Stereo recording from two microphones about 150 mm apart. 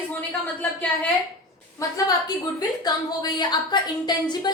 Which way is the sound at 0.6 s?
10° left (ahead or behind).